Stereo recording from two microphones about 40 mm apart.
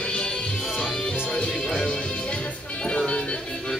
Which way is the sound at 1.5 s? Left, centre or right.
Centre.